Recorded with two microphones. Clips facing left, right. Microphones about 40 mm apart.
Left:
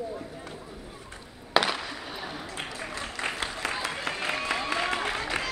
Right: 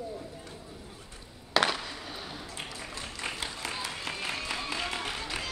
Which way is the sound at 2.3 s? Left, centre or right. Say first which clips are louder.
Left 4 dB; left.